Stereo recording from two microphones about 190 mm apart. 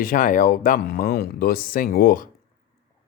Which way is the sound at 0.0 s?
45° left (ahead or behind).